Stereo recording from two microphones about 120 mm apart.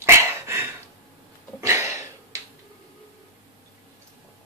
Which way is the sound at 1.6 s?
20° right (ahead or behind).